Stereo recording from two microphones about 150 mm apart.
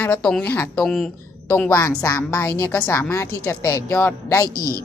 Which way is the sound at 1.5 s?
15° left (ahead or behind).